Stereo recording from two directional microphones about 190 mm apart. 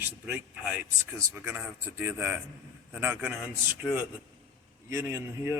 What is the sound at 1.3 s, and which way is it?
Speech, 5° right (ahead or behind).